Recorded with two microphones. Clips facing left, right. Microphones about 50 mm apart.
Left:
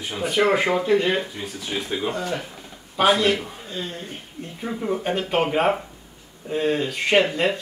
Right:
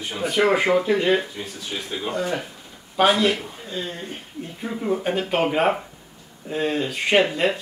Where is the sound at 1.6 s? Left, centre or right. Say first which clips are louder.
Left 4 dB; left.